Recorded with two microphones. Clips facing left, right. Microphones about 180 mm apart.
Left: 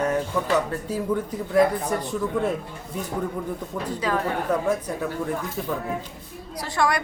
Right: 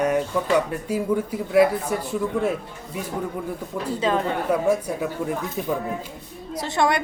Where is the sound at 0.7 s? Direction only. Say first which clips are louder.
Right 2 dB; 10° right (ahead or behind).